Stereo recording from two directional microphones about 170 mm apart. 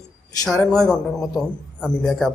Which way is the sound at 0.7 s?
5° left (ahead or behind).